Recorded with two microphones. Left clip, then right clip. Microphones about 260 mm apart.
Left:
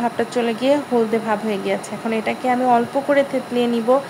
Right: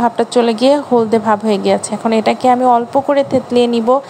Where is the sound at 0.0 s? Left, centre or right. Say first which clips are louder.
Right 8 dB; right.